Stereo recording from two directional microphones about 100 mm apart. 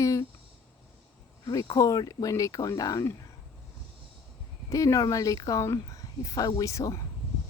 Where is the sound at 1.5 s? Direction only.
40° left (ahead or behind).